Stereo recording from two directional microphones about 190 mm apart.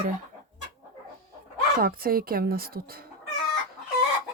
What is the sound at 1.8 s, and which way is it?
Speech, 50° right (ahead or behind).